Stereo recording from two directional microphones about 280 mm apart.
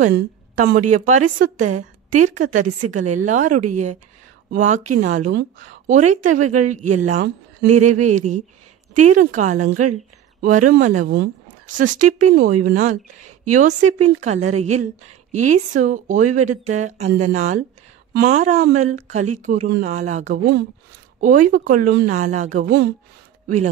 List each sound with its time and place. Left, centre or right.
0.0 s a woman's voice: right
21.5 s a woman's voice: right